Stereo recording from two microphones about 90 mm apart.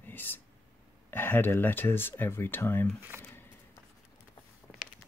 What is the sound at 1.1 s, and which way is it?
Speech, 20° left (ahead or behind).